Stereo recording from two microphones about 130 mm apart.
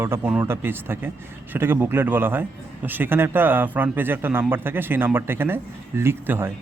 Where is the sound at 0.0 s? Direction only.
15° right (ahead or behind).